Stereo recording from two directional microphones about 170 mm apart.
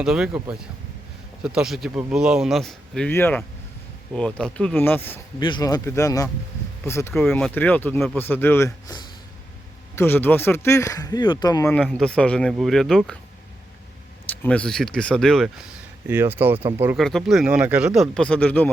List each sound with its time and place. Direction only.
0.0 s speech: 5° right (ahead or behind)
1.5 s speech: centre (ahead or behind)
5.4 s speech: 25° left (ahead or behind)
7.1 s speech: centre (ahead or behind); by 11.7 s 20° left (ahead or behind)
11.7 s speech: 5° left (ahead or behind)
14.3 s speech: 10° left (ahead or behind)
16.0 s speech: 15° right (ahead or behind)
17.0 s speech: centre (ahead or behind)